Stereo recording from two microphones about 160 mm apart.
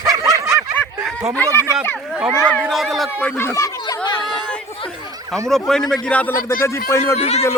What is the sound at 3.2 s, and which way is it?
Speech, 10° left (ahead or behind).